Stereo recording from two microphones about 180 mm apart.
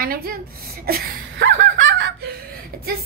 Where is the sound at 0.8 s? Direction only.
55° right (ahead or behind); by 1.7 s 85° right.